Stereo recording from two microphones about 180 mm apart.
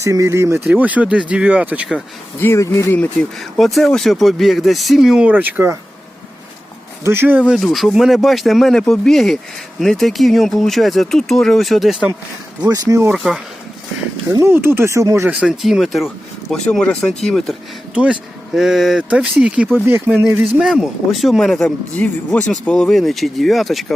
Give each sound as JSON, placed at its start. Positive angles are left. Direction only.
{"t": 0.0, "sound": "speech", "side_deg": -15}
{"t": 2.4, "sound": "speech", "side_deg": 15}
{"t": 7.0, "sound": "speech", "side_deg": -10}
{"t": 7.4, "sound": "speech", "side_deg": 0}
{"t": 12.6, "sound": "speech", "side_deg": -20}
{"t": 13.1, "sound": "speech", "side_deg": 0}
{"t": 14.3, "sound": "speech", "side_deg": -15}